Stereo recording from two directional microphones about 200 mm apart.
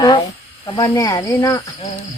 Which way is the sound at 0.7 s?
20° left (ahead or behind).